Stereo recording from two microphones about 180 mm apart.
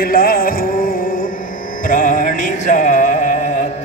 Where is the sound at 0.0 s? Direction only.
55° left (ahead or behind).